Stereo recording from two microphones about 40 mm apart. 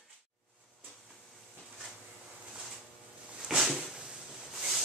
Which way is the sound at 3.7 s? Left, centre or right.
Centre.